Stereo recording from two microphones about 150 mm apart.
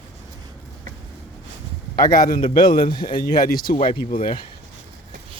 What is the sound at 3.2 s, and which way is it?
Speech, 75° left (ahead or behind).